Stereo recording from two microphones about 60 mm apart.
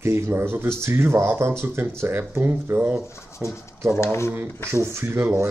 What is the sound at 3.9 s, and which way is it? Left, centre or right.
Speech, left.